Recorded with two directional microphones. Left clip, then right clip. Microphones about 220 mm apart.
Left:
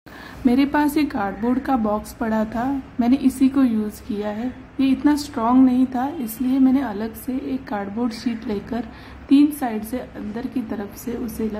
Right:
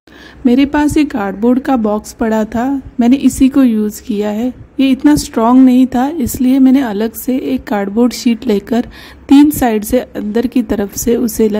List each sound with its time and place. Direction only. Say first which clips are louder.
0.5 s a woman's voice: right 7 dB; 40° right (ahead or behind)